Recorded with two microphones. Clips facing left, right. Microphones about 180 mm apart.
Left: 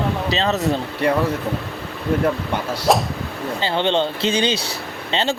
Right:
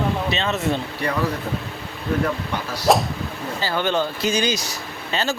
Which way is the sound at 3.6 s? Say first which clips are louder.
Left 3 dB; 25° left (ahead or behind).